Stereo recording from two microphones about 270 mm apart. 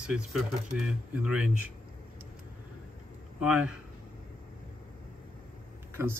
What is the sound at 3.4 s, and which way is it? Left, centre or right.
Speech, centre.